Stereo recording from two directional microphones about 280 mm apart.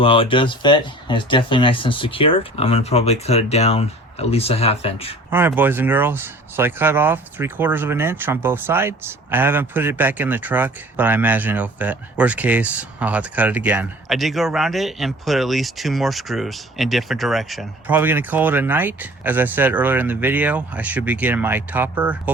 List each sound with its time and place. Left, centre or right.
0.0 s speech: centre
5.3 s speech: centre